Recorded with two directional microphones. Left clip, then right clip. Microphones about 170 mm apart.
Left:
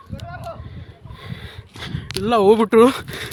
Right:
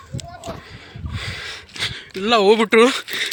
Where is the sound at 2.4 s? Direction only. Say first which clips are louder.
Left 1 dB; 40° left (ahead or behind).